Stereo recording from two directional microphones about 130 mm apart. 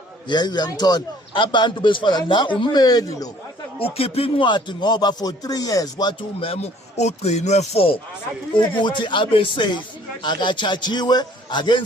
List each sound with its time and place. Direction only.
0.3 s speech: 35° left (ahead or behind)
3.8 s speech: 45° left (ahead or behind); by 6.1 s 30° left (ahead or behind)
6.4 s speech: 50° left (ahead or behind)
8.5 s speech: 40° left (ahead or behind)